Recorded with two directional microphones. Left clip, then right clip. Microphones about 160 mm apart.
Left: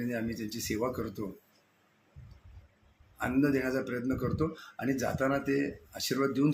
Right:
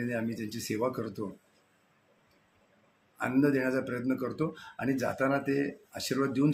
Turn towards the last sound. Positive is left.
turn(degrees=-10)  # may be behind; listen again after turning